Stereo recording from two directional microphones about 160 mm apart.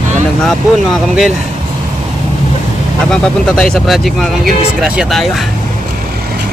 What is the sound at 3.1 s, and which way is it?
Speech, 5° left (ahead or behind).